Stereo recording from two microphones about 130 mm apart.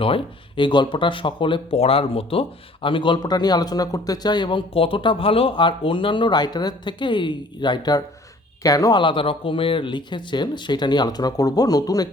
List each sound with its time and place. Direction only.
0.0 s speech: 40° left (ahead or behind)